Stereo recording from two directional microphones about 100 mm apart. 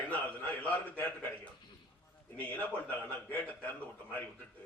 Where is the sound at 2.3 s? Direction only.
15° left (ahead or behind).